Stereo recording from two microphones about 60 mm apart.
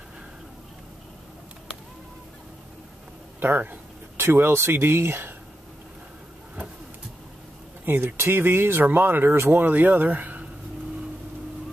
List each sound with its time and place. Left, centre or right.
3.3 s speech: right
7.8 s speech: right